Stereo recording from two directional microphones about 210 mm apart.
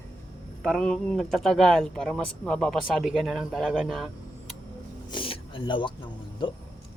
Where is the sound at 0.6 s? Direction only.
5° left (ahead or behind).